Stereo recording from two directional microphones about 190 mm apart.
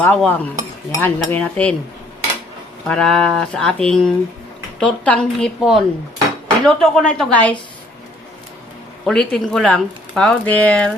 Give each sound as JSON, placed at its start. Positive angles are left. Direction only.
{"t": 0.0, "sound": "cutlery", "side_deg": 10}
{"t": 2.8, "sound": "speech", "side_deg": 5}
{"t": 9.0, "sound": "speech", "side_deg": 0}